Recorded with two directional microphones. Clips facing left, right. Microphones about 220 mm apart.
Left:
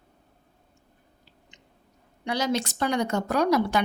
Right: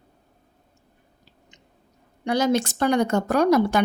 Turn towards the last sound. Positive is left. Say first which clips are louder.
# right 4 dB
turn(degrees=-50)  # may be behind; listen again after turning